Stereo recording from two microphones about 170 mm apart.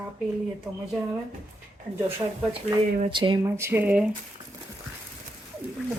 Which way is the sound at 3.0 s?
30° right (ahead or behind).